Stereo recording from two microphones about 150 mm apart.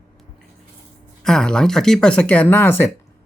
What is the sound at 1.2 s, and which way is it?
Speech, 5° left (ahead or behind).